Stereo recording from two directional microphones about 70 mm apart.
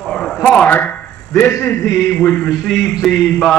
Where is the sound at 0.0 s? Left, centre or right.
Centre.